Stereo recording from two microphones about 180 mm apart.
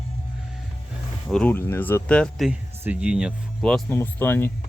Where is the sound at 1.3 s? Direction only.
10° left (ahead or behind).